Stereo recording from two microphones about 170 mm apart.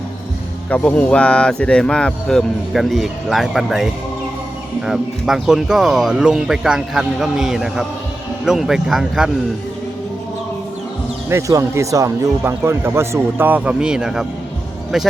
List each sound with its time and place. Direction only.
0.7 s speech: 10° left (ahead or behind)
4.9 s speech: centre (ahead or behind)
11.3 s speech: 15° right (ahead or behind); by 15.1 s centre (ahead or behind)